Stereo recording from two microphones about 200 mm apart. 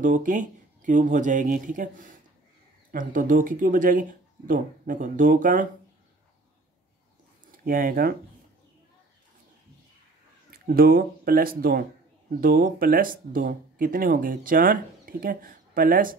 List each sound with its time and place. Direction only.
0.0 s speech: 40° right (ahead or behind)
7.5 s speech: 45° right (ahead or behind)
10.5 s speech: 50° right (ahead or behind)